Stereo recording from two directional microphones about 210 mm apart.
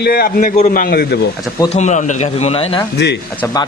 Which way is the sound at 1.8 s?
35° left (ahead or behind).